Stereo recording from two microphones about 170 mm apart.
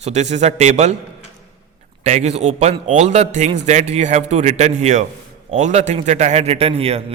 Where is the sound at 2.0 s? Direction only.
40° right (ahead or behind).